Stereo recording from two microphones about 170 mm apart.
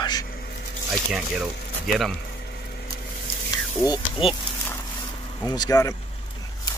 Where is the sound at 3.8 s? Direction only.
25° left (ahead or behind).